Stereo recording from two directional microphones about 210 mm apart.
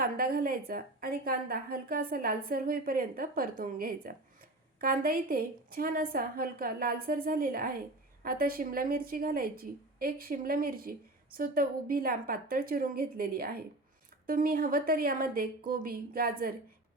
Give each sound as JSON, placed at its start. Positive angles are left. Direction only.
{"t": 0.0, "sound": "a woman's voice", "side_deg": -45}